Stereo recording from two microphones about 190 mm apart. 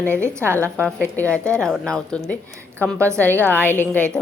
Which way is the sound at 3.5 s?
10° left (ahead or behind).